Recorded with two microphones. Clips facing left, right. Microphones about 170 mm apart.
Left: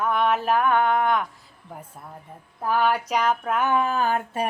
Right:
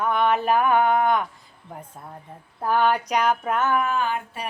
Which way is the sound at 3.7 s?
35° left (ahead or behind).